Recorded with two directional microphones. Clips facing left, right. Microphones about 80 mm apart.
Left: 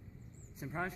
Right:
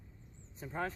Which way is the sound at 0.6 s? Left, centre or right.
Centre.